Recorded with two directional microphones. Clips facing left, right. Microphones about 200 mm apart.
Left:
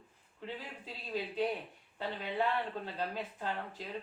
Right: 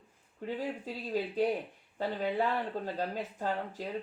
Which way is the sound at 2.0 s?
45° right (ahead or behind).